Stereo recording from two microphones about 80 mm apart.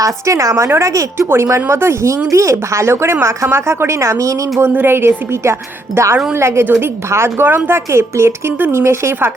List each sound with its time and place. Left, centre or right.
0.0 s speech: right
4.7 s a woman's voice: right